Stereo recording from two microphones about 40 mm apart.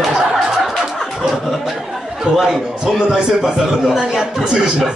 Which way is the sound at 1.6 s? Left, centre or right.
Centre.